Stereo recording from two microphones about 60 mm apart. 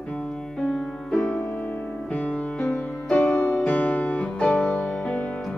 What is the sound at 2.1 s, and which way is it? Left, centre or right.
Music, centre.